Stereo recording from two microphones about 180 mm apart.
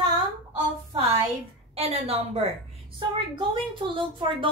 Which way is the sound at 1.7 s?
35° right (ahead or behind).